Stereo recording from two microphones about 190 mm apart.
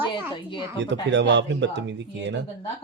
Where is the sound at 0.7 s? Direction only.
70° right (ahead or behind).